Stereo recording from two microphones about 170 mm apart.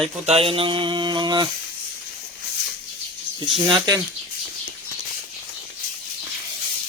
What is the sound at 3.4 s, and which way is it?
Speech, 30° right (ahead or behind).